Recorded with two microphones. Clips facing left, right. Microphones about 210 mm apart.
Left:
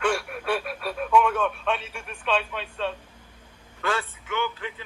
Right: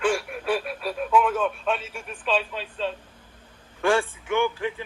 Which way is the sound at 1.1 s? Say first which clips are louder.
Even; 5° right (ahead or behind).